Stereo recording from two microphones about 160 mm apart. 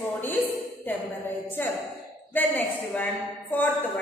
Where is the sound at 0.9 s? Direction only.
10° left (ahead or behind).